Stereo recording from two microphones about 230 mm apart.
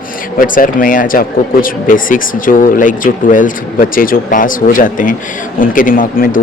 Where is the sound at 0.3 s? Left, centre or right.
Left.